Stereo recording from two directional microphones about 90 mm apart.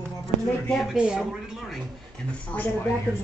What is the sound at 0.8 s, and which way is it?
Speech, 5° right (ahead or behind).